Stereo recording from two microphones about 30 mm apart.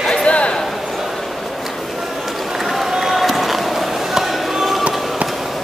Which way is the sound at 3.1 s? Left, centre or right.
Centre.